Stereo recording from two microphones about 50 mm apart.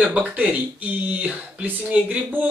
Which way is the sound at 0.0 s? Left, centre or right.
Right.